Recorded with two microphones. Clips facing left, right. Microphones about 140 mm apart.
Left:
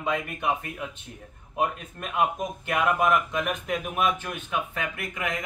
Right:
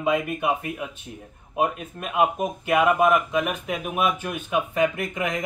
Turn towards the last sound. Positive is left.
turn(degrees=-20)  # may be behind; listen again after turning